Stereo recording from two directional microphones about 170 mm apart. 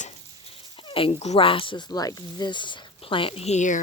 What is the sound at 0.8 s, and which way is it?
Speech, 30° left (ahead or behind).